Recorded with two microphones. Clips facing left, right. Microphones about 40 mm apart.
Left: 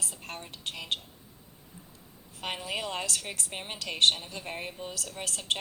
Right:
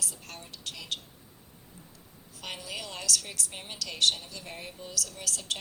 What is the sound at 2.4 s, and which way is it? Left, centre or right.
A woman's voice, left.